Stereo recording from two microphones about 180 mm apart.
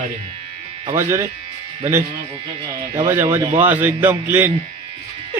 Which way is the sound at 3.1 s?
15° right (ahead or behind).